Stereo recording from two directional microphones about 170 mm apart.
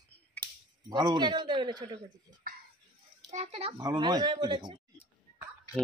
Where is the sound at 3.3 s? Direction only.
40° right (ahead or behind).